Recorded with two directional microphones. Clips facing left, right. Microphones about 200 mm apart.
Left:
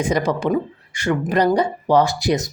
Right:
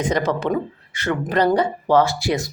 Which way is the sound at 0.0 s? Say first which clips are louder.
Left 1 dB; 10° left (ahead or behind).